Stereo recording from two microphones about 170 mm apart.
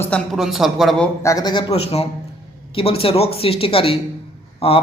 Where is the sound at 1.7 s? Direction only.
35° left (ahead or behind).